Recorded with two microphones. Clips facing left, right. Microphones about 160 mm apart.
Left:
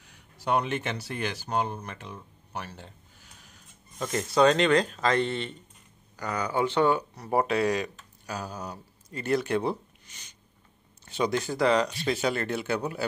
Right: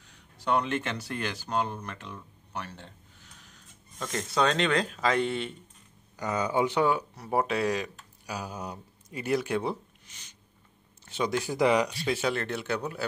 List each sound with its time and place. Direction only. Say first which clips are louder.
0.0 s speech: even; 10° left (ahead or behind)
4.0 s speech: left 5 dB; 5° left (ahead or behind)
6.1 s speech: right 1 dB; 20° right (ahead or behind); by 8.4 s centre (ahead or behind)
8.4 s speech: even; 20° right (ahead or behind)
9.2 s speech: left 2 dB; 5° right (ahead or behind)
11.5 s speech: right 1 dB; 15° right (ahead or behind); by 13.0 s 5° left (ahead or behind)